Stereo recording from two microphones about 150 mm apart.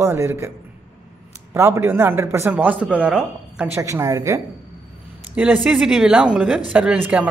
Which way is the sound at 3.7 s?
20° right (ahead or behind).